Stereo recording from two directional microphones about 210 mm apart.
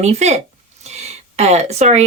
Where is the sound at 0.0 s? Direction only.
30° right (ahead or behind).